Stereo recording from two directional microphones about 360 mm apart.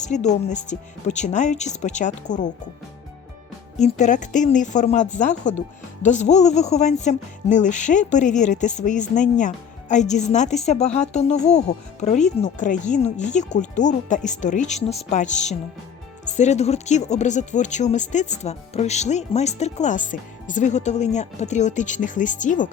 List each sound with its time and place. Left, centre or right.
0.0 s speech: centre
3.8 s speech: centre